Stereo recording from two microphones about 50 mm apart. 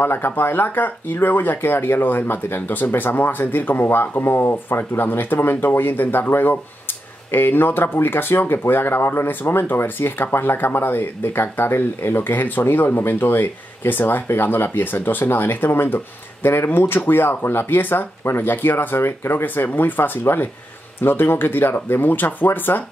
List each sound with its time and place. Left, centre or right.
0.0 s speech: left